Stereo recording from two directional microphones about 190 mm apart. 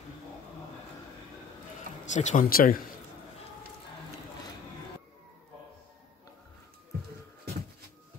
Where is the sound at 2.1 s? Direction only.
40° left (ahead or behind).